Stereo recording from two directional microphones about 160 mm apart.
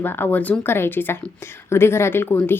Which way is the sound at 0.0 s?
15° left (ahead or behind).